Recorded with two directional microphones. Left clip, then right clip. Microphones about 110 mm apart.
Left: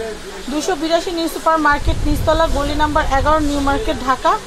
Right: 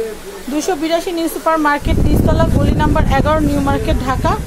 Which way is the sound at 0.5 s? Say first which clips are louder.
Right 1 dB; 25° right (ahead or behind).